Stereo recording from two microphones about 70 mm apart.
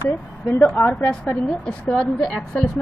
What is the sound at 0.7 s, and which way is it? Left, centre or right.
Speech, centre.